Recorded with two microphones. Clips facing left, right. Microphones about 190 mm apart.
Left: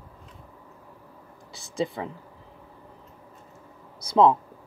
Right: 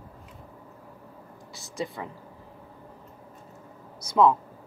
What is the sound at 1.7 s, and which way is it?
Speech, 25° left (ahead or behind).